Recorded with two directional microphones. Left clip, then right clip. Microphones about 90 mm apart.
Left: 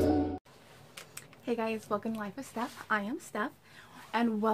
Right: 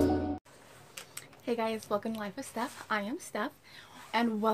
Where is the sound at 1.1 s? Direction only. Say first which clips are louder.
Right 1 dB; 20° right (ahead or behind).